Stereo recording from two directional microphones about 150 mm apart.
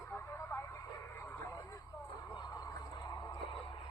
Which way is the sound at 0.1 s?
20° left (ahead or behind).